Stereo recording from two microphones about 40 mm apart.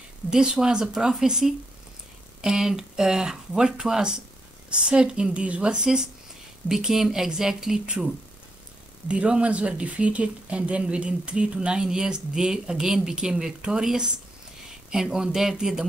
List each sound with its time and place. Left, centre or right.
0.3 s speech: centre
9.0 s speech: right
14.9 s speech: centre